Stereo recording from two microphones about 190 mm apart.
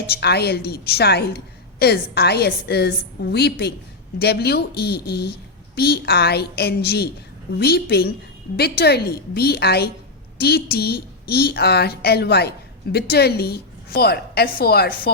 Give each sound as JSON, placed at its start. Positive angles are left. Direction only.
{"t": 0.1, "sound": "a woman's voice", "side_deg": 60}